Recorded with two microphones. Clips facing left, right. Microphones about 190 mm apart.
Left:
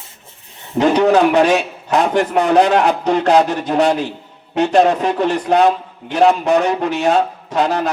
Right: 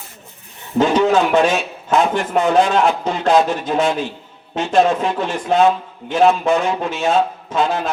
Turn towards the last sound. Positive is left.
turn(degrees=65)  # may be behind; listen again after turning